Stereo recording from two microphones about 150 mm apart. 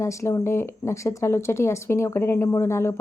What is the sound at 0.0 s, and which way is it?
A woman's voice, 20° left (ahead or behind).